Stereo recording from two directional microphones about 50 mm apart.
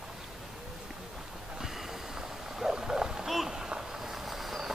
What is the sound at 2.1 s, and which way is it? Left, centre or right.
Hoot, centre.